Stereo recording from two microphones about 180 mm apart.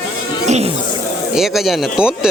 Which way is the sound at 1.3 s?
Centre (ahead or behind).